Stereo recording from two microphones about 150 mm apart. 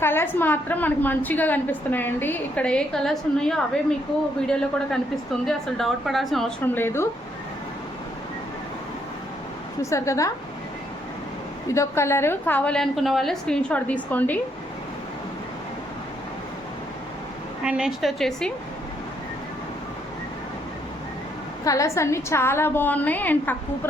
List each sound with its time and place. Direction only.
0.0 s a woman's voice: 15° left (ahead or behind)
5.5 s a woman's voice: centre (ahead or behind)
6.7 s a woman's voice: 15° left (ahead or behind)
9.8 s a woman's voice: 20° left (ahead or behind)
11.7 s a woman's voice: 20° left (ahead or behind)
17.6 s a woman's voice: 5° right (ahead or behind)
21.6 s a woman's voice: 20° left (ahead or behind)